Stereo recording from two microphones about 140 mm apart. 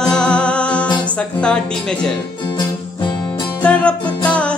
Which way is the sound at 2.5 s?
35° left (ahead or behind).